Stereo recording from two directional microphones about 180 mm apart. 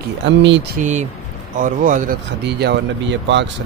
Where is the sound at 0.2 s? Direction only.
85° right.